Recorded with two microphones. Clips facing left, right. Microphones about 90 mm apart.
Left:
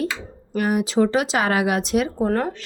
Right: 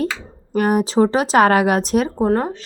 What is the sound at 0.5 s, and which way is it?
Speech, 45° right (ahead or behind).